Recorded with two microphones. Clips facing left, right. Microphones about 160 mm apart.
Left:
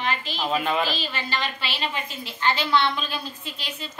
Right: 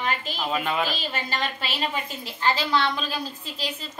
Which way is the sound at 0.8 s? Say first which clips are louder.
Even; 45° right (ahead or behind).